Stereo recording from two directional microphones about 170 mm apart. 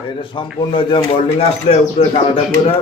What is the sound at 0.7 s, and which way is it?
Speech, 30° left (ahead or behind).